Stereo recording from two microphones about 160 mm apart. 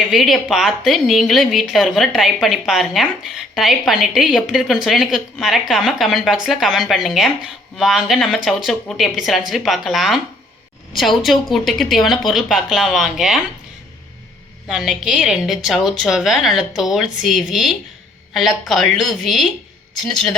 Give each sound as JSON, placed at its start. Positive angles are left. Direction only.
{"t": 0.1, "sound": "a woman's voice", "side_deg": 0}
{"t": 14.7, "sound": "a woman's voice", "side_deg": -5}